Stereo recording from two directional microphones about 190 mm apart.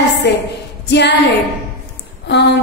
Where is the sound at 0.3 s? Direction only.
60° left (ahead or behind).